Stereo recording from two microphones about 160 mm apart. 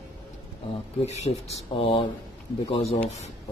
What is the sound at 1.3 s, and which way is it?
Speech, 35° left (ahead or behind).